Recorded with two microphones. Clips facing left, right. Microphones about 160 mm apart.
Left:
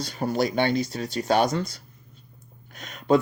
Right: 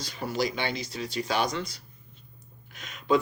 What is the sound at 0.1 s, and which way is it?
Speech, 45° left (ahead or behind).